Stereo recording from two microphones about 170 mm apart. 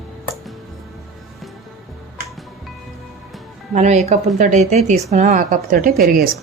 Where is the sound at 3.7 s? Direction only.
40° right (ahead or behind); by 6.3 s 60° right (ahead or behind).